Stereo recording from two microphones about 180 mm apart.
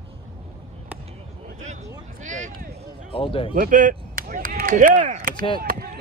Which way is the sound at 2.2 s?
40° right (ahead or behind).